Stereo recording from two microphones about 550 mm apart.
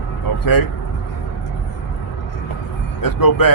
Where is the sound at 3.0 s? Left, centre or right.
Left.